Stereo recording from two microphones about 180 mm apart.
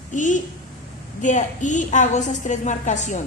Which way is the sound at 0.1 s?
45° left (ahead or behind).